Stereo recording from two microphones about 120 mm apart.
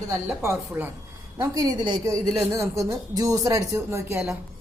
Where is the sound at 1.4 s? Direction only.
30° right (ahead or behind).